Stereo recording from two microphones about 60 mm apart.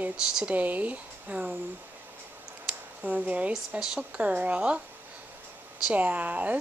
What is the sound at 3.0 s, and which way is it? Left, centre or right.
Speech, right.